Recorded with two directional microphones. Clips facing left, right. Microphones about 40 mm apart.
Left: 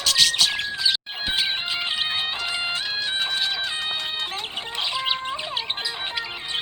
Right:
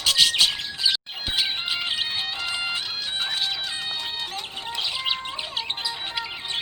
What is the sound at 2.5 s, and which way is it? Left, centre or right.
Music, centre.